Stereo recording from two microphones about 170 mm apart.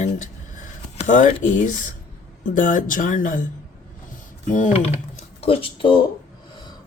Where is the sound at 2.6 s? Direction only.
50° left (ahead or behind).